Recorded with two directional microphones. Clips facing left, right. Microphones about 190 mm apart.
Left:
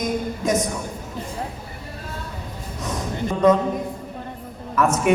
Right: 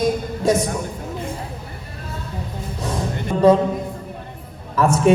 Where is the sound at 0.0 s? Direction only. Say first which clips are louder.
Right 4 dB; 30° right (ahead or behind).